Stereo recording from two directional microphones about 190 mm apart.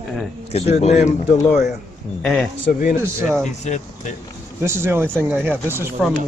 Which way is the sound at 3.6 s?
40° left (ahead or behind).